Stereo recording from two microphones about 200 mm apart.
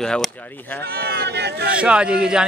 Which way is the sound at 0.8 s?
50° right (ahead or behind).